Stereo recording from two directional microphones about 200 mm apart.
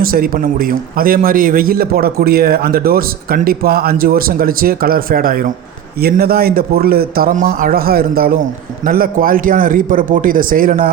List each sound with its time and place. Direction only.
0.0 s speech: 45° right (ahead or behind)